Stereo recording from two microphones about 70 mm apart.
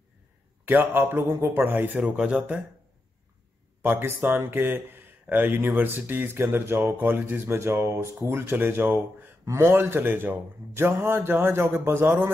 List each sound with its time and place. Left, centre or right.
0.7 s speech: right
2.0 s speech: centre
3.8 s speech: right
8.3 s speech: right
10.9 s speech: right